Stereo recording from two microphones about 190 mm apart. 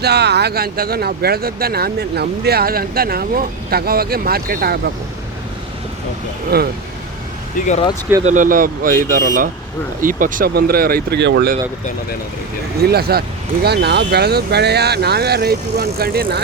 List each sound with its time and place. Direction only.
0.0 s speech: 60° right (ahead or behind)
6.5 s speech: 55° right (ahead or behind)
8.2 s speech: 40° right (ahead or behind); by 11.5 s 65° right (ahead or behind)
12.8 s speech: 55° right (ahead or behind)